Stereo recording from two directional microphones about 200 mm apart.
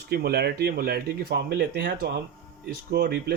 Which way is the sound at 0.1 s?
50° right (ahead or behind).